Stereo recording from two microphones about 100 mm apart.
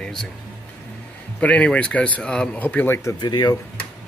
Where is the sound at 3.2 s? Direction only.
45° left (ahead or behind).